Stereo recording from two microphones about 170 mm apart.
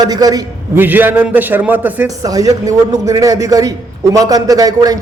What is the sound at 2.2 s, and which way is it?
A man's voice, 20° right (ahead or behind).